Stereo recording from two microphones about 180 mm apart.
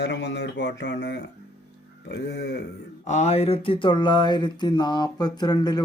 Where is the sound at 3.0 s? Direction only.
40° left (ahead or behind); by 5.8 s 25° left (ahead or behind).